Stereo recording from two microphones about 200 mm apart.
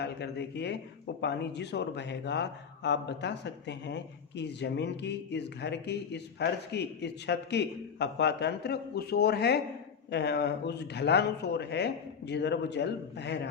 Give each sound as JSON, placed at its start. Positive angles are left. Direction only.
{"t": 0.0, "sound": "speech", "side_deg": 55}